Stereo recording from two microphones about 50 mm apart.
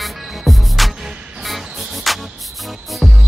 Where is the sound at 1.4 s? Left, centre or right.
Centre.